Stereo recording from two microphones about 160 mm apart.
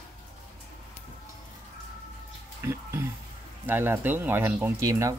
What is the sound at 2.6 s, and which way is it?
Speech, 15° right (ahead or behind).